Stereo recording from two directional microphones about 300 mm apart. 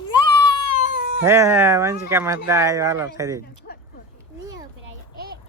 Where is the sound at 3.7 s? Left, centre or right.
Left.